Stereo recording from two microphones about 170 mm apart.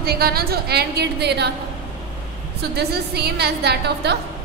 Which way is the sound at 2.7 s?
70° right (ahead or behind).